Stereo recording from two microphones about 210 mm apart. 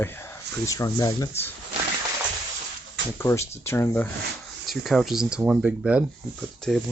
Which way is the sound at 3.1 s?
10° left (ahead or behind).